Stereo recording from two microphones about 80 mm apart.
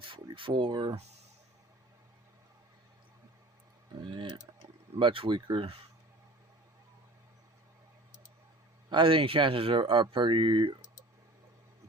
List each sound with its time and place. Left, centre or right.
0.1 s speech: right
4.0 s speech: right
8.9 s speech: right